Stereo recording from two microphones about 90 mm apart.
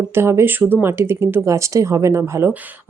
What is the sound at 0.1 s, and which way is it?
A woman's voice, 30° right (ahead or behind).